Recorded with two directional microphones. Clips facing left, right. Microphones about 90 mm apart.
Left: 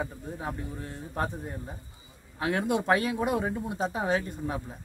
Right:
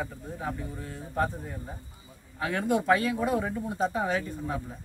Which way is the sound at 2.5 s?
20° left (ahead or behind).